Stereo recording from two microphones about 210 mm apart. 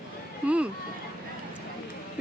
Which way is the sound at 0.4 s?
5° right (ahead or behind).